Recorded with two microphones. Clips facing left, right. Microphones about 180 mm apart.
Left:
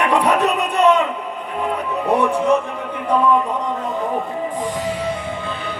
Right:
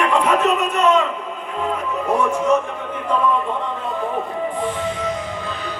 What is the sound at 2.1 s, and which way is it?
Speech, 35° left (ahead or behind).